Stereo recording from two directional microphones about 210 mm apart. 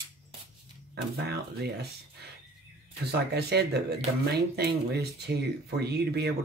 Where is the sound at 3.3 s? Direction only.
50° right (ahead or behind).